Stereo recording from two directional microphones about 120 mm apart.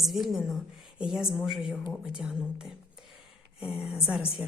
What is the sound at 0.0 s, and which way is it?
A woman's voice, centre (ahead or behind).